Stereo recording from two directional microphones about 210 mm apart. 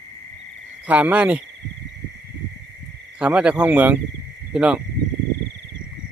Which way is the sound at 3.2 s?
5° right (ahead or behind).